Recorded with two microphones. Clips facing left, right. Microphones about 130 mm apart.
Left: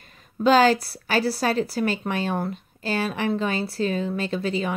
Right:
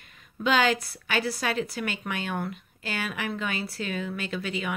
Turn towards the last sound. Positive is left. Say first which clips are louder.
# left 6 dB
turn(degrees=30)  # may be behind; listen again after turning